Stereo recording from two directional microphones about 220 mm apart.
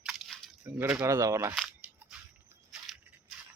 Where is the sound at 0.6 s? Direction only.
5° right (ahead or behind).